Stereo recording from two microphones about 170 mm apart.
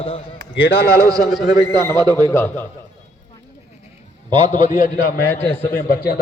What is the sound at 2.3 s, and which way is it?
Speech, 15° left (ahead or behind).